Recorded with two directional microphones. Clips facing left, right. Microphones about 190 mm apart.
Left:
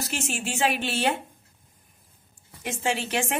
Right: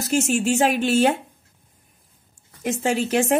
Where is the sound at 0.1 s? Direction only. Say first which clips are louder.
Right 16 dB; 45° right (ahead or behind).